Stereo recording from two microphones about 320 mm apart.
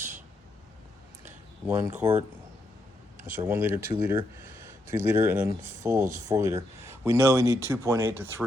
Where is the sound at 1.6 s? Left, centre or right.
Centre.